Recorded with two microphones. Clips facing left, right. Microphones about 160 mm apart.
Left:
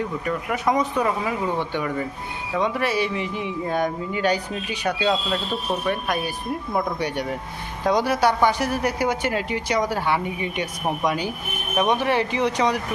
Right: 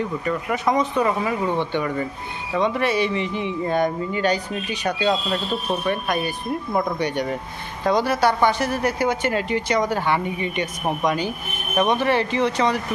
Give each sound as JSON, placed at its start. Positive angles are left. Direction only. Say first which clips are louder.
{"t": 0.3, "sound": "speech", "louder": "right 1 dB", "side_deg": 10}
{"t": 5.3, "sound": "speech", "louder": "right 1 dB", "side_deg": -5}
{"t": 5.9, "sound": "speech", "louder": "right 1 dB", "side_deg": 5}